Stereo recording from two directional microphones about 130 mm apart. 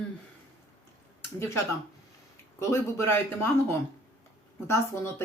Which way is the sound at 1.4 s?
20° left (ahead or behind).